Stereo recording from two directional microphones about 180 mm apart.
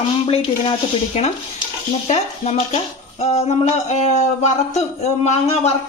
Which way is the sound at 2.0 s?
40° left (ahead or behind).